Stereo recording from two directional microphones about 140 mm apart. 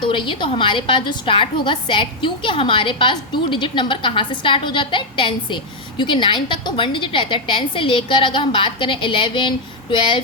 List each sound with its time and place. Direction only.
0.0 s a woman's voice: 35° left (ahead or behind)